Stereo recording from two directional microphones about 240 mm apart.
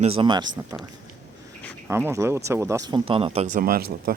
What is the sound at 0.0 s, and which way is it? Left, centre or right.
Speech, right.